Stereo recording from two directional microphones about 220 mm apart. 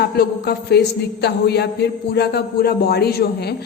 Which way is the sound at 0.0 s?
45° left (ahead or behind).